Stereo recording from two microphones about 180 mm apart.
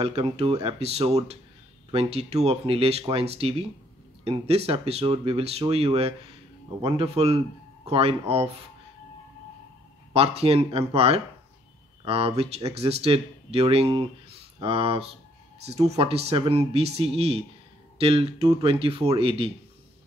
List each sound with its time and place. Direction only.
0.0 s speech: 30° right (ahead or behind)
10.1 s speech: 35° right (ahead or behind)